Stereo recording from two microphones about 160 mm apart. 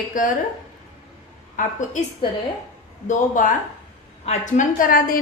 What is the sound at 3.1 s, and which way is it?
A woman's voice, 55° left (ahead or behind).